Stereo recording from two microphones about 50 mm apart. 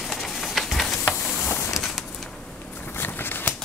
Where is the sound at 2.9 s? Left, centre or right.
Left.